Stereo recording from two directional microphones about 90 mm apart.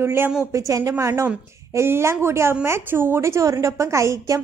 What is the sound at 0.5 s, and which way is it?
A woman's voice, 40° right (ahead or behind).